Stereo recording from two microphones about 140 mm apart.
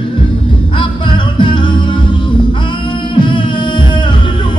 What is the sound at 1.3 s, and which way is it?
Music, 35° left (ahead or behind).